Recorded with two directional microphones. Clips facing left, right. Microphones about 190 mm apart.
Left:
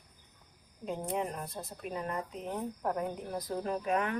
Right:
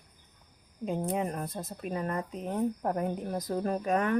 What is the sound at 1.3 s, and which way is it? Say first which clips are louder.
Speech: right 4 dB; 50° right (ahead or behind).